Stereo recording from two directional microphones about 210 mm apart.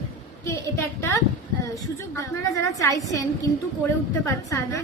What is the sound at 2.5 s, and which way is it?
Speech, 15° left (ahead or behind).